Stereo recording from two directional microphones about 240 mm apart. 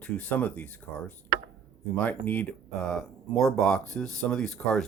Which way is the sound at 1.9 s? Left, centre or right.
Centre.